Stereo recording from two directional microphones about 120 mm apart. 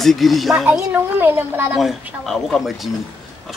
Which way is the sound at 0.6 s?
15° right (ahead or behind).